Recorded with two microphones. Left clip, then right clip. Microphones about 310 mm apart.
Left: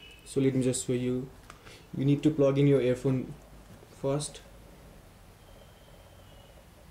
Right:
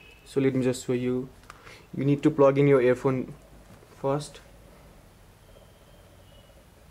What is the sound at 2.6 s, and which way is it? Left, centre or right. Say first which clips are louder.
Speech: right 5 dB; right.